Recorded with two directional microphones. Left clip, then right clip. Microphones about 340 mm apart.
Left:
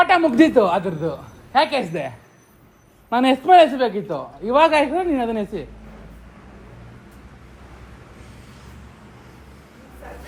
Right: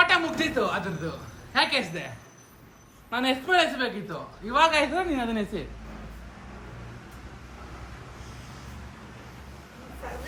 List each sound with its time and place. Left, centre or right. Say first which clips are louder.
0.0 s a man's voice: left 8 dB; centre